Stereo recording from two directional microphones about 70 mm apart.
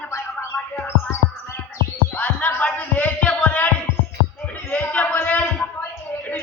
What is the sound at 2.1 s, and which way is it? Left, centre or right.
Music, left.